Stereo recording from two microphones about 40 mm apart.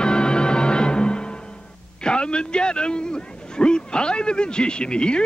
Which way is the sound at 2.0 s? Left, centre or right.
Left.